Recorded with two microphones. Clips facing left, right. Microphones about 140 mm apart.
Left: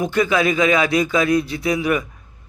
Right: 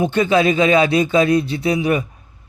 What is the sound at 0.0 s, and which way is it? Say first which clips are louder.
Speech: right 3 dB; 30° right (ahead or behind).